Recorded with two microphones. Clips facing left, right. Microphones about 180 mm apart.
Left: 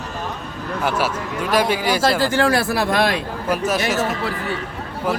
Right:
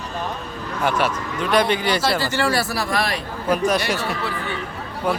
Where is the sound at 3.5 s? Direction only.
5° left (ahead or behind).